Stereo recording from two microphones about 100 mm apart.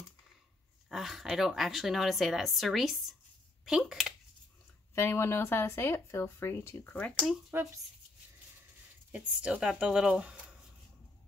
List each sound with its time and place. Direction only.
0.8 s a woman's voice: centre (ahead or behind)
4.9 s speech: 25° left (ahead or behind)
7.5 s speech: 20° right (ahead or behind)
9.1 s speech: 10° right (ahead or behind)